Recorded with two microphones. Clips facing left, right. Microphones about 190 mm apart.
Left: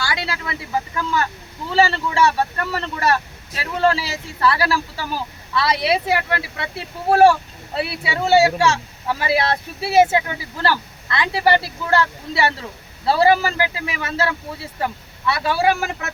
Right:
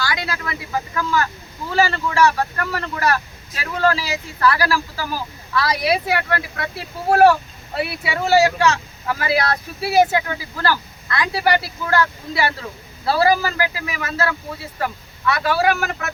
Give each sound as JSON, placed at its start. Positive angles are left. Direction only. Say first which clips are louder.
{"t": 0.1, "sound": "vehicle", "louder": "even", "side_deg": 25}
{"t": 0.9, "sound": "speech", "louder": "right 1 dB", "side_deg": 25}